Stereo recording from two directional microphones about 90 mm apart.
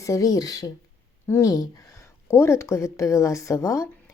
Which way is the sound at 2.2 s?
30° left (ahead or behind).